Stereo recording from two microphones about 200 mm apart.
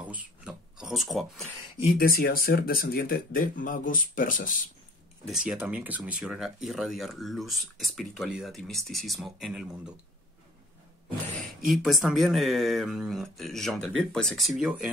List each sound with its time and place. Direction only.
0.0 s speech: 5° right (ahead or behind)
2.0 s speech: 50° left (ahead or behind)
5.2 s speech: 5° right (ahead or behind)
11.6 s speech: centre (ahead or behind)